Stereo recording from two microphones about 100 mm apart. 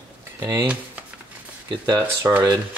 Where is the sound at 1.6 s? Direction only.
40° right (ahead or behind).